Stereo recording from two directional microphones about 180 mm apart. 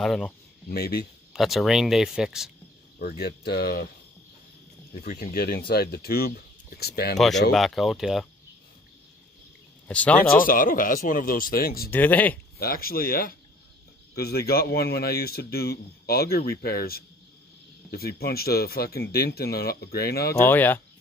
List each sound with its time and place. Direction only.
0.0 s speech: centre (ahead or behind)
0.7 s speech: 60° left (ahead or behind)
1.3 s speech: centre (ahead or behind)
3.0 s speech: 60° left (ahead or behind)
5.1 s speech: 55° left (ahead or behind)
7.2 s speech: centre (ahead or behind)
9.8 s speech: 5° left (ahead or behind)
10.4 s speech: 50° left (ahead or behind)
11.9 s speech: 10° left (ahead or behind)
12.5 s speech: 55° left (ahead or behind)
20.3 s speech: 10° left (ahead or behind)